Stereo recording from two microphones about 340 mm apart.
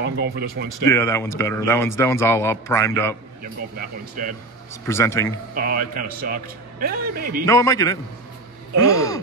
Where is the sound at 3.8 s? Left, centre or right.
Right.